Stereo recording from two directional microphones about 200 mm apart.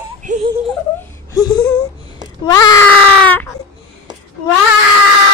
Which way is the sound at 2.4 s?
20° left (ahead or behind).